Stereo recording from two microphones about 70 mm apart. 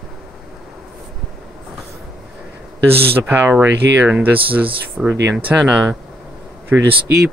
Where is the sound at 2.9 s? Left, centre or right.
Right.